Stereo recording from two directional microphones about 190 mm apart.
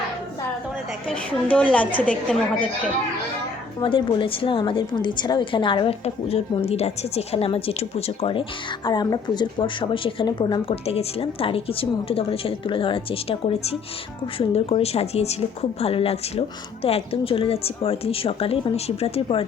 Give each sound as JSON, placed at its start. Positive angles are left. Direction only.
{"t": 1.0, "sound": "a woman's voice", "side_deg": 5}
{"t": 3.8, "sound": "a woman's voice", "side_deg": 25}